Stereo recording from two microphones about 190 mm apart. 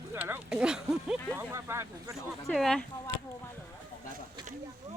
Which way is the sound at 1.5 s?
15° right (ahead or behind).